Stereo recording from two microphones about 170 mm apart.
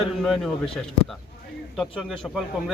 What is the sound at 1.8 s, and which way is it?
Speech, centre (ahead or behind).